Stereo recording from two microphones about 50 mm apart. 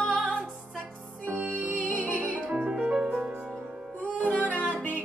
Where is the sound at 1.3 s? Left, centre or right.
Right.